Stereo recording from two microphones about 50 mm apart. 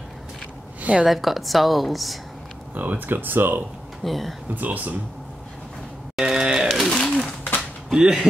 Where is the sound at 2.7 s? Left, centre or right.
Right.